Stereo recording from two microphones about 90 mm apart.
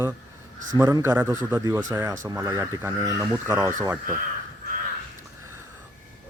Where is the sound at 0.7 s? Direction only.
40° right (ahead or behind).